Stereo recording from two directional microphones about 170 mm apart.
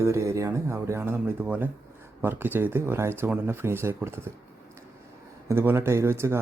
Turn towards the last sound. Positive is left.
turn(degrees=-15)  # may be behind; listen again after turning